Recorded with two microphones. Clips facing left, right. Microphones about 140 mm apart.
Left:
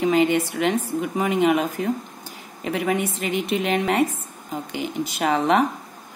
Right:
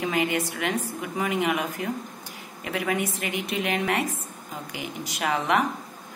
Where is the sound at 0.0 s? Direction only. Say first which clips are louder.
Left 7 dB; 25° left (ahead or behind).